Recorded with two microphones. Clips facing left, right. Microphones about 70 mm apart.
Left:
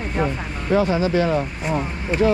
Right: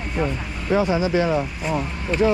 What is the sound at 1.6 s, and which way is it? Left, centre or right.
Speech, centre.